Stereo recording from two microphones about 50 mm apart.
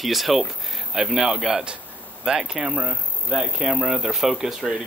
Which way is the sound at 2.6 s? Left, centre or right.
Right.